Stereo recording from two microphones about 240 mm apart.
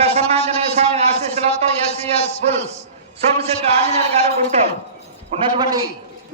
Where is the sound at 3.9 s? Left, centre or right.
Right.